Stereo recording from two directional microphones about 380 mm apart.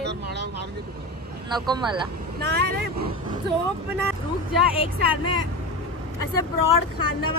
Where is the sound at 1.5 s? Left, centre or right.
Centre.